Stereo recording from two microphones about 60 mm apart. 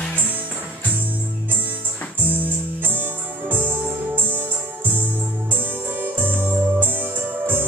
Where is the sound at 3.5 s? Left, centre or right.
Right.